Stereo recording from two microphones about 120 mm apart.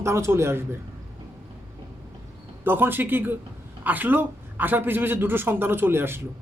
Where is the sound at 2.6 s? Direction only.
15° right (ahead or behind).